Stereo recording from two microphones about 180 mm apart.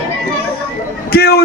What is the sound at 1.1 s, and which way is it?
Speech, 60° left (ahead or behind).